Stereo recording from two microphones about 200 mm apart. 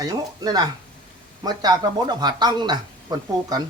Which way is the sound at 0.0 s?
20° right (ahead or behind).